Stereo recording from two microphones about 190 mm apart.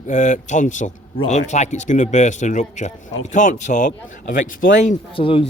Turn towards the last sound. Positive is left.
turn(degrees=30)  # may be behind; listen again after turning